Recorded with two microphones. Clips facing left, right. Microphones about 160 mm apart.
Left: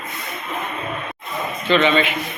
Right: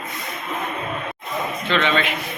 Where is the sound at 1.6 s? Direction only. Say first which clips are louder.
Left 5 dB; centre (ahead or behind).